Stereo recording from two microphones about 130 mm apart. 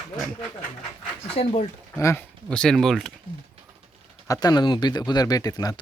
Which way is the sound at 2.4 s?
5° left (ahead or behind).